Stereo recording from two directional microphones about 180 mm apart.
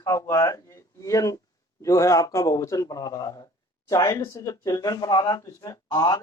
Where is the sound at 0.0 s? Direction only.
20° left (ahead or behind).